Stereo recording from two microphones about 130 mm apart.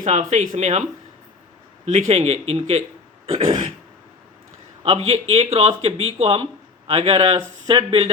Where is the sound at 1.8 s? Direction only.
55° right (ahead or behind).